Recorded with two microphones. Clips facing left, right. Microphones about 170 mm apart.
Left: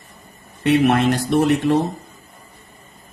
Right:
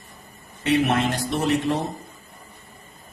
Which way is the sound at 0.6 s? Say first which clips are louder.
Left 5 dB; 65° left (ahead or behind).